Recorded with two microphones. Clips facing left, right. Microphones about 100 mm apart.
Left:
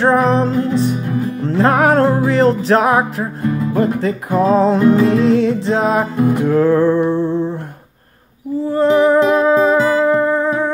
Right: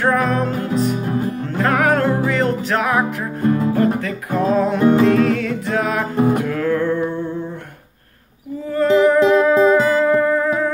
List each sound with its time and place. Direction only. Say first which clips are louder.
0.0 s music: left 4 dB; 30° left (ahead or behind)
3.7 s speech: left 2 dB; 30° left (ahead or behind)
5.0 s music: left 3 dB; 30° left (ahead or behind)
6.4 s speech: left 7 dB; 30° left (ahead or behind)
7.1 s humming: left 7 dB; 30° left (ahead or behind)
8.7 s music: left 1 dB; 30° left (ahead or behind)